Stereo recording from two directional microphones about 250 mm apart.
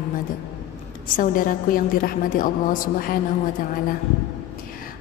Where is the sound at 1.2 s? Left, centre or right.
Left.